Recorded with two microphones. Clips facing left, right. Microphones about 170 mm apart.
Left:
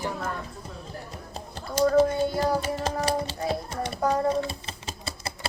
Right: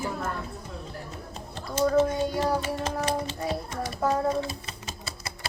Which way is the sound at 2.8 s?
35° left (ahead or behind).